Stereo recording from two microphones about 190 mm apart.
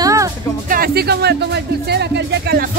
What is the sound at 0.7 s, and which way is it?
Speech, 50° right (ahead or behind).